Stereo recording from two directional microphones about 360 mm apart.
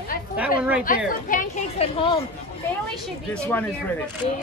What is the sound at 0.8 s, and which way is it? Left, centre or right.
A woman's voice, left.